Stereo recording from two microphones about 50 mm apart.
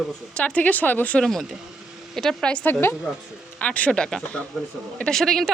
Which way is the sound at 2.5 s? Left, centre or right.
Left.